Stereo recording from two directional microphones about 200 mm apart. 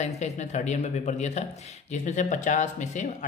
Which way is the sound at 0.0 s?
35° left (ahead or behind).